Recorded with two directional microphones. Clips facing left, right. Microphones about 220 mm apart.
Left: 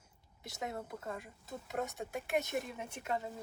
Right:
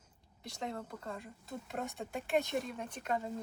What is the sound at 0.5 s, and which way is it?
Speech, 5° left (ahead or behind).